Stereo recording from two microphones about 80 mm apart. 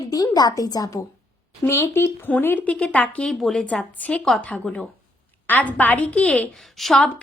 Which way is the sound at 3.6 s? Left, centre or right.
Centre.